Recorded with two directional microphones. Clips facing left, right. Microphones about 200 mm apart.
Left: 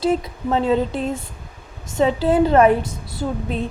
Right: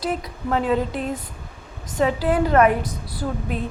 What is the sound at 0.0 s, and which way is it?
A woman's voice, 25° left (ahead or behind).